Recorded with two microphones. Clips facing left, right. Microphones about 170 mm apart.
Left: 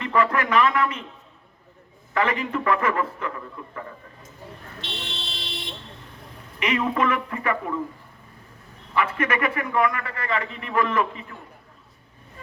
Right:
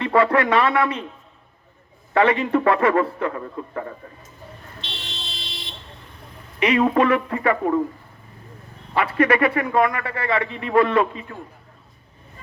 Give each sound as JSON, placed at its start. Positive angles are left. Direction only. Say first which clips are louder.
{"t": 0.0, "sound": "a man's voice", "louder": "right 5 dB", "side_deg": -35}
{"t": 2.1, "sound": "a man's voice", "louder": "right 6 dB", "side_deg": -30}
{"t": 4.8, "sound": "vehicle", "louder": "left 3 dB", "side_deg": 60}
{"t": 6.6, "sound": "a man's voice", "louder": "right 6 dB", "side_deg": -30}
{"t": 9.0, "sound": "a man's voice", "louder": "right 6 dB", "side_deg": -35}